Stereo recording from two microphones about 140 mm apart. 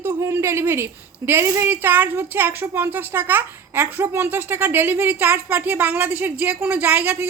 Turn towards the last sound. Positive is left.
turn(degrees=-10)  # may be behind; listen again after turning